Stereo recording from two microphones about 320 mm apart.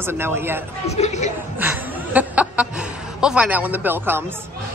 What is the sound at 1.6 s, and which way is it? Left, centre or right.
A woman's voice, centre.